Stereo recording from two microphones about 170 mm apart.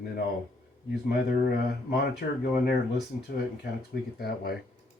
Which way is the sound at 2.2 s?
70° left (ahead or behind).